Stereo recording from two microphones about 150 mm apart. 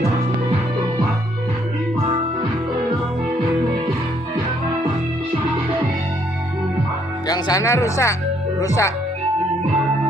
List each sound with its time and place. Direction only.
7.2 s speech: 25° left (ahead or behind)